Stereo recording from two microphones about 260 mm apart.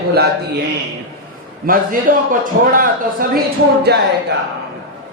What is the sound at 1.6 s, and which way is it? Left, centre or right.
A man's voice, right.